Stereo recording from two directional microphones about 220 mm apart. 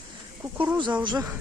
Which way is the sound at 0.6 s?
15° right (ahead or behind).